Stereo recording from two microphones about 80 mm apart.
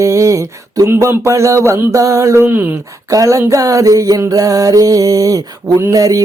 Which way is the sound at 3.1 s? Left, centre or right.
Right.